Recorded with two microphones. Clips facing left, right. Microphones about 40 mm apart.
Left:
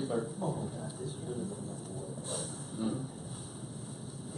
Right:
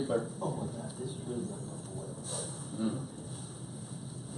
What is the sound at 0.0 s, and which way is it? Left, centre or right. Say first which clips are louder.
Speech: right 2 dB; centre.